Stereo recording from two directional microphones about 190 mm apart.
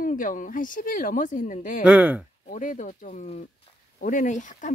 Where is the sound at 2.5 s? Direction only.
45° left (ahead or behind).